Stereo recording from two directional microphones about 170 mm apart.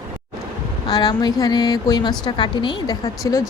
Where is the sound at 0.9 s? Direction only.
25° left (ahead or behind).